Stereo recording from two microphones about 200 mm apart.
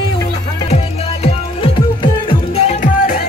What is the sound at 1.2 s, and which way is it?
Music, 25° left (ahead or behind).